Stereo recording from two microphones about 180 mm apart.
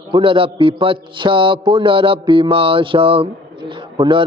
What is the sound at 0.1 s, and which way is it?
A man's voice, 30° right (ahead or behind).